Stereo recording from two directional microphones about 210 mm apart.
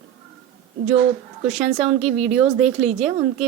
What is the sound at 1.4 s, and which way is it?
Speech, centre (ahead or behind).